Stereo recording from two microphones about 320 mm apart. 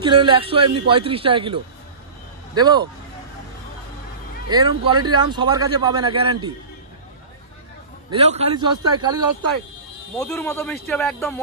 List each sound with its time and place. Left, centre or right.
0.0 s speech: centre
4.5 s speech: centre
8.1 s speech: centre
10.1 s speech: centre